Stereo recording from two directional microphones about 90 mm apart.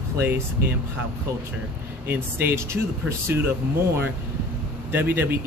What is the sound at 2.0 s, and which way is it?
Speech, 25° right (ahead or behind).